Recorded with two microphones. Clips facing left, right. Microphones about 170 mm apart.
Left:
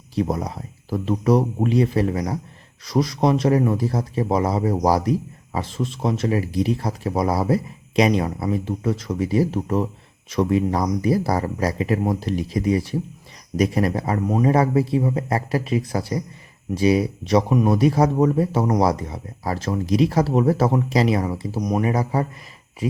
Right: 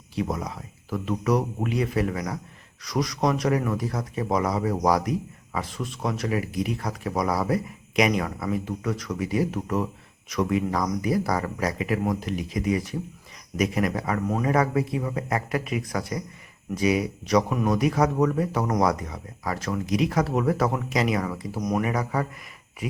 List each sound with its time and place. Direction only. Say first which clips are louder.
0.2 s a man's voice: left 5 dB; 35° left (ahead or behind)